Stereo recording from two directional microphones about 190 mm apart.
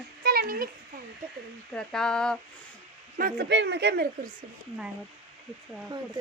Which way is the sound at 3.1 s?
50° right (ahead or behind).